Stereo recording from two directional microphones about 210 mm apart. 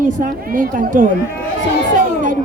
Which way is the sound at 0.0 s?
40° right (ahead or behind).